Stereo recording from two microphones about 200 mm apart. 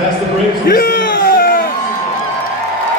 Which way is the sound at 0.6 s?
45° left (ahead or behind).